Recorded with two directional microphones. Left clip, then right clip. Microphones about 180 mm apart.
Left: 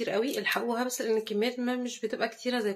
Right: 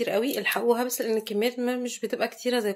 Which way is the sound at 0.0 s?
45° right (ahead or behind).